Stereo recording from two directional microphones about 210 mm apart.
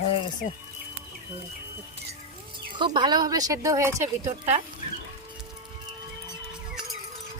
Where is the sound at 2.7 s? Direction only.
20° right (ahead or behind).